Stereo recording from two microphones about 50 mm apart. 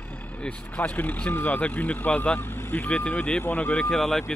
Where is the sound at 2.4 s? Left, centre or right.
Left.